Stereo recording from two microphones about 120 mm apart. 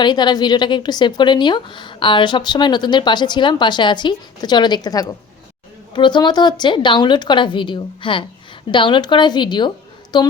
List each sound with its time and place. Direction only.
0.0 s a woman's voice: 35° left (ahead or behind)